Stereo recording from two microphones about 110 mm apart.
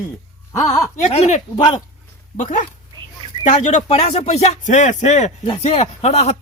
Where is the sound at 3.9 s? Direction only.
75° left (ahead or behind); by 6.4 s 90° left.